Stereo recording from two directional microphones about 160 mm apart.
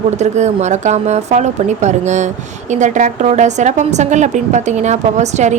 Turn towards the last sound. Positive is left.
turn(degrees=-45)  # may be behind; listen again after turning